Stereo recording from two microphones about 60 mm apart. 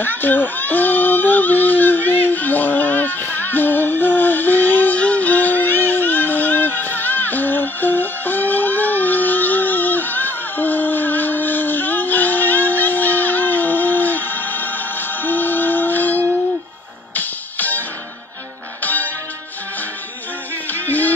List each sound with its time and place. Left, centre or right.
0.0 s a sound: left
17.1 s music: left
20.7 s music: left